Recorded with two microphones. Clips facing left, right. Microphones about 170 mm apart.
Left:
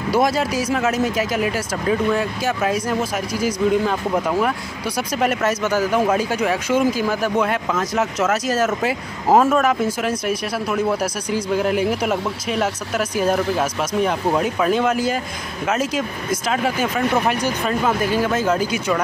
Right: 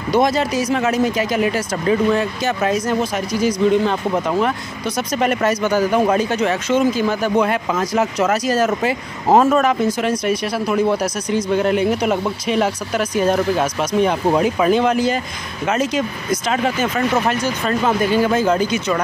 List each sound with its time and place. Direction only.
0.1 s speech: 5° left (ahead or behind)